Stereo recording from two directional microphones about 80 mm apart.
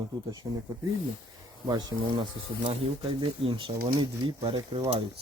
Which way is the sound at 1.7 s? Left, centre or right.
Right.